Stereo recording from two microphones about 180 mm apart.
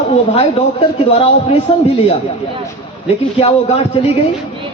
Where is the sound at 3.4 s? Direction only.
35° left (ahead or behind).